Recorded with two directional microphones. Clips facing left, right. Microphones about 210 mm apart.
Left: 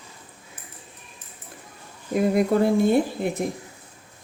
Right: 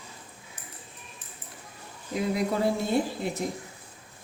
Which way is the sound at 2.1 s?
50° left (ahead or behind).